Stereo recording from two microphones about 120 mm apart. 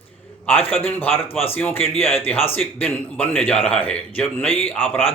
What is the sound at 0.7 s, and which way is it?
A man's voice, 15° left (ahead or behind).